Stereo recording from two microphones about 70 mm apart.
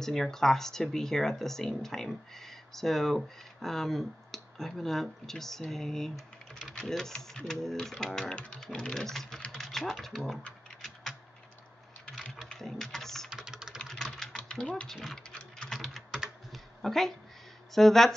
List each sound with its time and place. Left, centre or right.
0.0 s speech: centre
9.6 s typing: centre
10.0 s speech: centre
12.5 s typing: centre
13.3 s engine: centre
13.7 s typing: centre
14.5 s speech: centre
14.9 s speech: centre
15.7 s typing: centre
16.5 s a sound: centre
17.7 s speech: centre